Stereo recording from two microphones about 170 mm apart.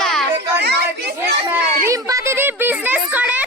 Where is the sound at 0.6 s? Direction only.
75° right (ahead or behind).